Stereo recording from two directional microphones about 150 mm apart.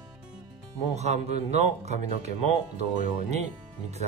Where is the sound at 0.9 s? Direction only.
45° right (ahead or behind).